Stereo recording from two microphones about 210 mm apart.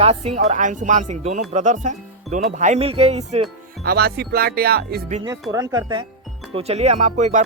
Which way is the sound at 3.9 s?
50° right (ahead or behind).